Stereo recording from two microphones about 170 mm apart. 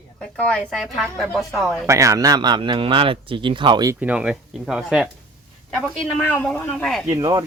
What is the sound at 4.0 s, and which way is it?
Speech, 5° right (ahead or behind).